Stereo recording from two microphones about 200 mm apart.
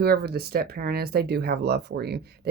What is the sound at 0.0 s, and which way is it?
Speech, 55° right (ahead or behind).